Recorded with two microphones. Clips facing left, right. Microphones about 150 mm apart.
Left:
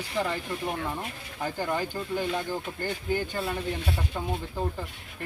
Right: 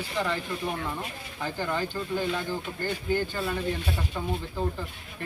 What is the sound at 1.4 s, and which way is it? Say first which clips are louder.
Speech: left 1 dB; 15° left (ahead or behind).